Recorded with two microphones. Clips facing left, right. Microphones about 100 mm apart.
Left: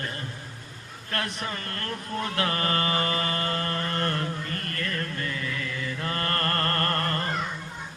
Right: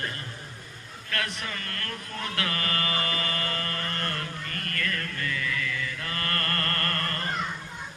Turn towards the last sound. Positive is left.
turn(degrees=30)  # may be behind; listen again after turning